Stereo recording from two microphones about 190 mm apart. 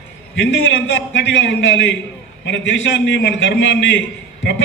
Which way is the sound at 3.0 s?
70° left (ahead or behind).